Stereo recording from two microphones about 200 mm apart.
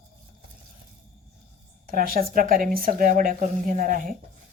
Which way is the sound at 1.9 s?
45° right (ahead or behind).